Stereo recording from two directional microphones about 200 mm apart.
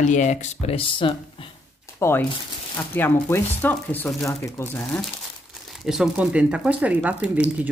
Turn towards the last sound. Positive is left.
turn(degrees=-5)  # may be behind; listen again after turning